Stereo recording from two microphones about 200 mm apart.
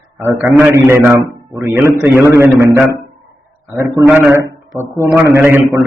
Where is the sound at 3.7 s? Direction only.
15° right (ahead or behind).